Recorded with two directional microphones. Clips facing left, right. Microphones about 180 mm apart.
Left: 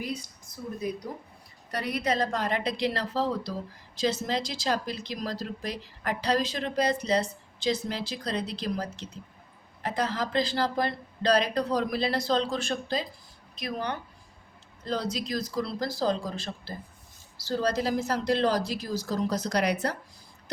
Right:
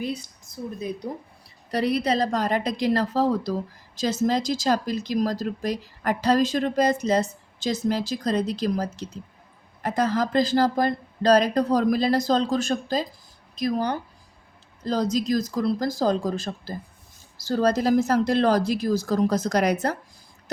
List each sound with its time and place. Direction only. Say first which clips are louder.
1.7 s a woman's voice: right 6 dB; 30° right (ahead or behind)